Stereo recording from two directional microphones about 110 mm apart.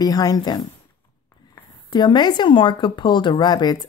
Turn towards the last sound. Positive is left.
turn(degrees=40)  # may be behind; listen again after turning